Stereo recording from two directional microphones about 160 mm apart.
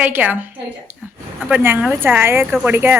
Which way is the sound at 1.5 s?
10° right (ahead or behind).